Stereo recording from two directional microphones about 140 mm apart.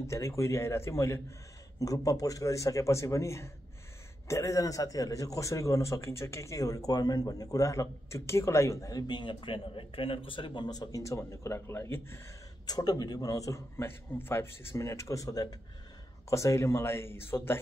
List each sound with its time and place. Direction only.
0.0 s a man's voice: 20° left (ahead or behind)
12.6 s a man's voice: 30° left (ahead or behind)